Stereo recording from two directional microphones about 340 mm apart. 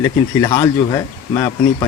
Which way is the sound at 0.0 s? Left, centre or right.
Centre.